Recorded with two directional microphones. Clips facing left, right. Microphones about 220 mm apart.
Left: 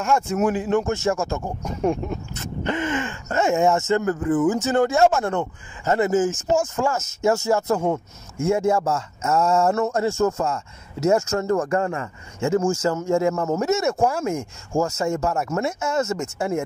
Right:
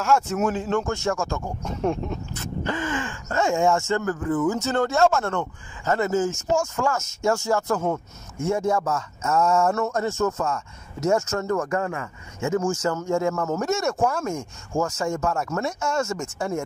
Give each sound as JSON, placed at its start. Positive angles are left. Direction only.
{"t": 0.0, "sound": "a man's voice", "side_deg": 10}
{"t": 0.7, "sound": "speech", "side_deg": 20}
{"t": 1.6, "sound": "a man's voice", "side_deg": 5}
{"t": 2.3, "sound": "speech", "side_deg": 20}